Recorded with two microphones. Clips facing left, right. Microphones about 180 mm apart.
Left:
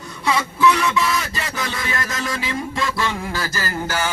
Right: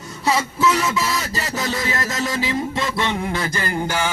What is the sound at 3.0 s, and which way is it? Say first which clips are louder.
A man's voice: right 2 dB; 20° right (ahead or behind).